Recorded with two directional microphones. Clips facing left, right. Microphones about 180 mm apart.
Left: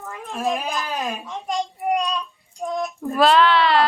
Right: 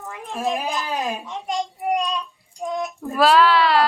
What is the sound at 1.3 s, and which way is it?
Child singing, centre (ahead or behind).